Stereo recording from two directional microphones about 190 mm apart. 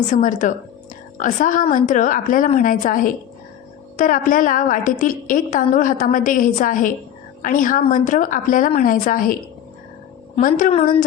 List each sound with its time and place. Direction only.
0.1 s a woman's voice: 40° left (ahead or behind)